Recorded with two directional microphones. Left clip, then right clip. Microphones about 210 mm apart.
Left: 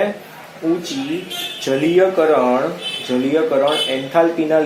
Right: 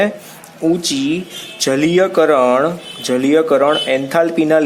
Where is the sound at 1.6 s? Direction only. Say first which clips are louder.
Right 1 dB; 55° right (ahead or behind).